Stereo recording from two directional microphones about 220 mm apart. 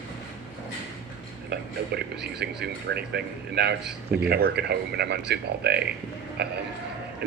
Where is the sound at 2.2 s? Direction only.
50° right (ahead or behind).